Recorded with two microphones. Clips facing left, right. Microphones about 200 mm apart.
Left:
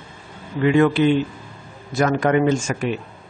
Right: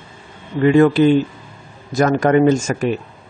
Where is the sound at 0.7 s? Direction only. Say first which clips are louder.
Right 4 dB; 40° right (ahead or behind).